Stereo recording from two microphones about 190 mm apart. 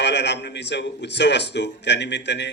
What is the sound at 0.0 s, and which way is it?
A man's voice, 65° left (ahead or behind).